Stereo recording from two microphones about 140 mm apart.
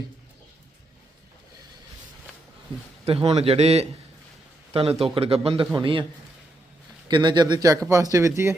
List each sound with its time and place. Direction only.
3.0 s a man's voice: 45° right (ahead or behind)
7.1 s a man's voice: 30° right (ahead or behind)